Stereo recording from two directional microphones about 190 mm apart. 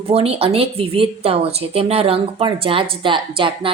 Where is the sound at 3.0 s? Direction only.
25° right (ahead or behind).